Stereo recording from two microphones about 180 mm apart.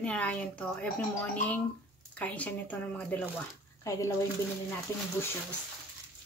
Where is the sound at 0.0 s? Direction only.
5° left (ahead or behind).